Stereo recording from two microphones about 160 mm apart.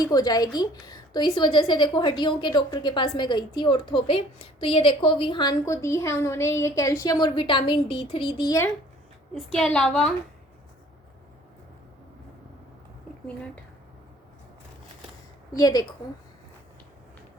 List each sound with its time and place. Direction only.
0.0 s a woman's voice: 25° left (ahead or behind)
9.3 s a woman's voice: 5° left (ahead or behind)
15.5 s a woman's voice: 25° left (ahead or behind)